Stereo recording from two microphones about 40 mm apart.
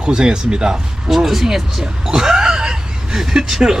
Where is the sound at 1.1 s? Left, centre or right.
Centre.